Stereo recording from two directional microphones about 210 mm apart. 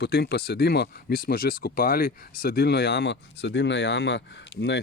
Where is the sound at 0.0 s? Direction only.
50° left (ahead or behind).